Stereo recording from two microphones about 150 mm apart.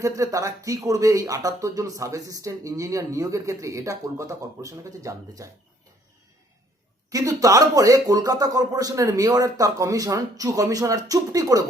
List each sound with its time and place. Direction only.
0.0 s speech: 20° right (ahead or behind)
7.1 s speech: 25° right (ahead or behind)